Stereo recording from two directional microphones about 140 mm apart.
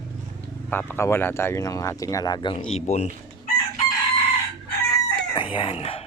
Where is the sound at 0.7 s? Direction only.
15° left (ahead or behind); by 2.6 s 30° left (ahead or behind).